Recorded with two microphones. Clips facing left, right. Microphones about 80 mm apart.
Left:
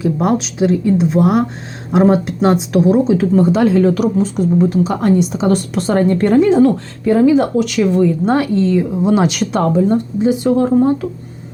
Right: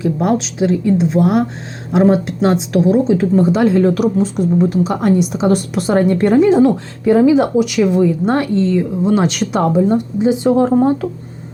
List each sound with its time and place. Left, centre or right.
0.0 s speech: centre
8.2 s speech: centre
8.7 s speech: centre
9.5 s speech: centre; by 10.9 s right